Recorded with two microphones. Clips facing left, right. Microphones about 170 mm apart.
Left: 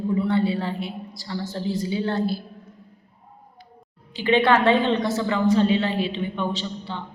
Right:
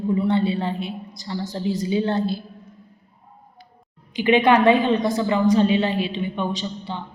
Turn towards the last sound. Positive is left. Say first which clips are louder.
# right 2 dB
turn(degrees=-15)  # may be behind; listen again after turning